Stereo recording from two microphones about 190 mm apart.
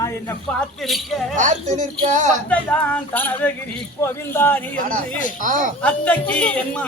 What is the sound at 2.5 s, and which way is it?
A man's voice, 5° left (ahead or behind).